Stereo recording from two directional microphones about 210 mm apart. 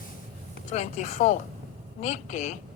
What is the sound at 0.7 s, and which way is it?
A woman's voice, 30° left (ahead or behind).